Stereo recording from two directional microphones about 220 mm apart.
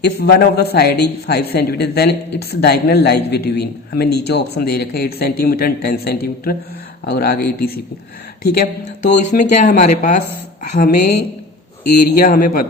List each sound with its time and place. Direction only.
0.0 s a woman's voice: 45° left (ahead or behind)
12.1 s speech: 40° left (ahead or behind)